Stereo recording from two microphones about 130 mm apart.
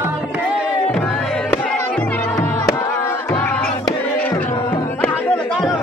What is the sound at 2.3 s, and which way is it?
Music, 20° left (ahead or behind).